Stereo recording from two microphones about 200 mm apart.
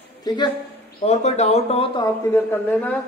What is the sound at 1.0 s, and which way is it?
Speech, 35° left (ahead or behind).